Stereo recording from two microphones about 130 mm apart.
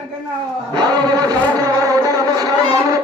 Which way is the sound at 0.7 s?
30° right (ahead or behind).